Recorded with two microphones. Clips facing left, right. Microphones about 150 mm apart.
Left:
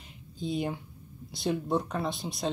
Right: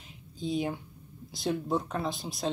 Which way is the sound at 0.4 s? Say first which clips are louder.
Right 1 dB; centre (ahead or behind).